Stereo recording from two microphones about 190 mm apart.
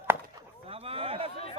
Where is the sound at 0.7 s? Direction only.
30° right (ahead or behind).